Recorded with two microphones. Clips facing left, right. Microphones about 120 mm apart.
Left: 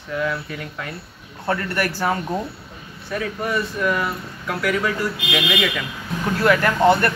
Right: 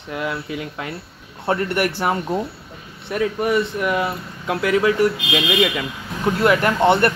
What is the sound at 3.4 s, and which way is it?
Speech, 20° right (ahead or behind).